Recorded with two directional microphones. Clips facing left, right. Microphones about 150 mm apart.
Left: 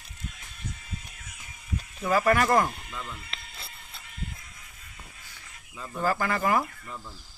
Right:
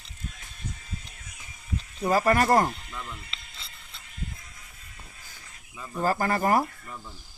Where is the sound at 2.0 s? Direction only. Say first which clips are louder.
Right 1 dB; 35° right (ahead or behind).